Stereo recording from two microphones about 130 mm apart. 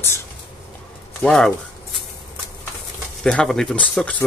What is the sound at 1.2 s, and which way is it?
Speech, 5° left (ahead or behind).